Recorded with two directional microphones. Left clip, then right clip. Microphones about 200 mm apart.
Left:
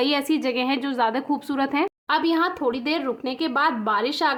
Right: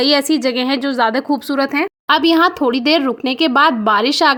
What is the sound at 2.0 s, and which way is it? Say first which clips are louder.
Speech: right 11 dB; 45° right (ahead or behind).